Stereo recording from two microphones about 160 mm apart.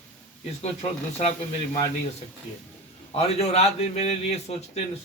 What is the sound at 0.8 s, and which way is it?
Speech, 40° left (ahead or behind).